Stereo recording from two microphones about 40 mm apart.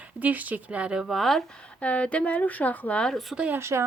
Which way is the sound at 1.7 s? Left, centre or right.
Left.